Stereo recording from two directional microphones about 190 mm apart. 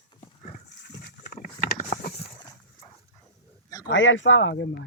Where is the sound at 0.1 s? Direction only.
25° left (ahead or behind).